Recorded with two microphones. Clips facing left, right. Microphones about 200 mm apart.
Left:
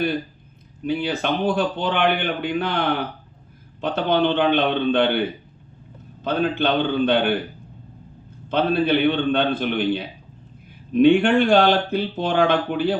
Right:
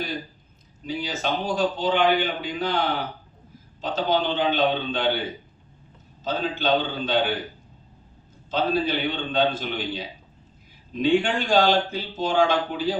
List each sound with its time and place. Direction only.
0.9 s a man's voice: 60° left (ahead or behind)
6.2 s a man's voice: 60° left (ahead or behind)
8.4 s a man's voice: 60° left (ahead or behind)